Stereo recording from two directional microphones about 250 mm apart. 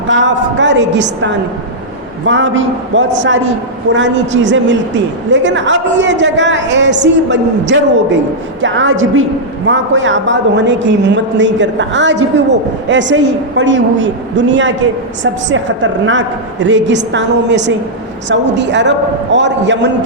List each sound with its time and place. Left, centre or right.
0.1 s a woman's voice: right
2.2 s a woman's voice: right